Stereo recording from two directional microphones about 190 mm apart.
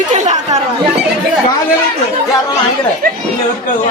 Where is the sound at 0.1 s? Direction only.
40° right (ahead or behind).